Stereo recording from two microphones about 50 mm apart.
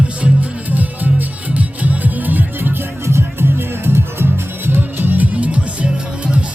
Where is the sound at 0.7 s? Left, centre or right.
Right.